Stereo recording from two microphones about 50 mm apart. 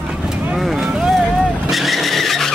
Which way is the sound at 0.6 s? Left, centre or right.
Centre.